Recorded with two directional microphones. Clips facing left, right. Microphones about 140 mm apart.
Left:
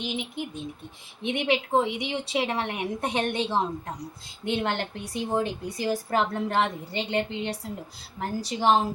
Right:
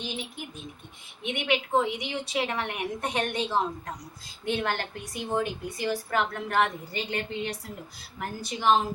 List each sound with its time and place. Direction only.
0.0 s a woman's voice: 20° left (ahead or behind)
1.2 s a woman's voice: 30° left (ahead or behind)